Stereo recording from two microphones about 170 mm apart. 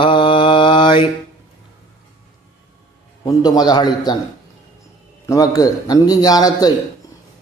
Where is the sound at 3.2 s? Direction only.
25° left (ahead or behind).